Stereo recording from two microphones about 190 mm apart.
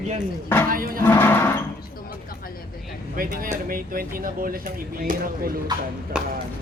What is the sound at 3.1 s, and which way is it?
Speech, 50° right (ahead or behind).